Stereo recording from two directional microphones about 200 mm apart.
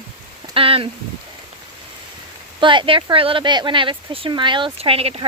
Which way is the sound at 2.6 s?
25° right (ahead or behind).